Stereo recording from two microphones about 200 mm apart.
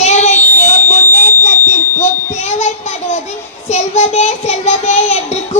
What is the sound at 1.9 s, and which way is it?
Smoke detector, 35° left (ahead or behind).